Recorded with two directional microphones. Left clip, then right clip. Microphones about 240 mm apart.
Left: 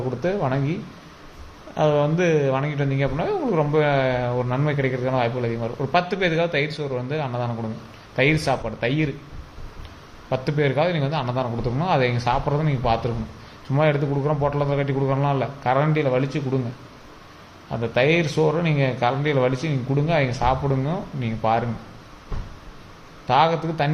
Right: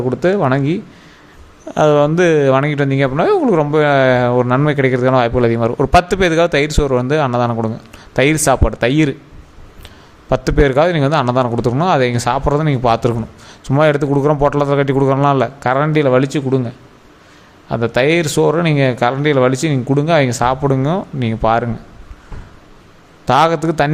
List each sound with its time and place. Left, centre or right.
0.2 s speech: right
10.2 s speech: right
17.7 s speech: right
23.2 s speech: right